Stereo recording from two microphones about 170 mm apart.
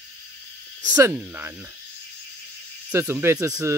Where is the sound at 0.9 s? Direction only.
15° right (ahead or behind).